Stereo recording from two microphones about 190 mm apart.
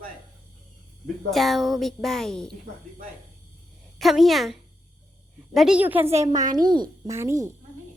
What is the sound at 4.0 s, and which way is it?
A woman's voice, centre (ahead or behind).